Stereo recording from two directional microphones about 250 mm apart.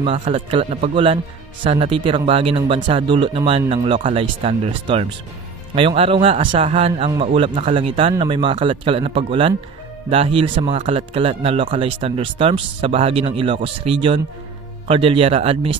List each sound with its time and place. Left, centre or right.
0.0 s a man's voice: right